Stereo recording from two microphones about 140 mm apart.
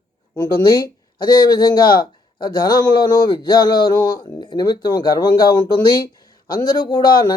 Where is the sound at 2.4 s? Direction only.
30° left (ahead or behind).